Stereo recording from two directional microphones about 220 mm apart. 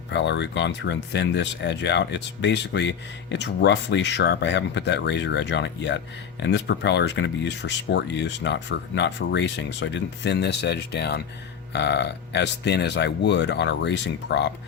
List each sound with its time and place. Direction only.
0.1 s speech: 55° left (ahead or behind)